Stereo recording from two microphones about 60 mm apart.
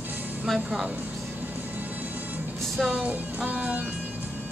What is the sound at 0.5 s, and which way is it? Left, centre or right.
Speech, centre.